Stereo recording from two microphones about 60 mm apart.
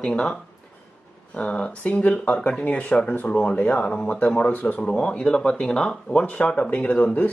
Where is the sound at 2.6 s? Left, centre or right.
Left.